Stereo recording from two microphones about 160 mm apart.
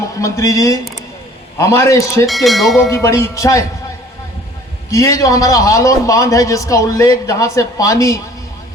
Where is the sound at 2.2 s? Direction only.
Centre (ahead or behind).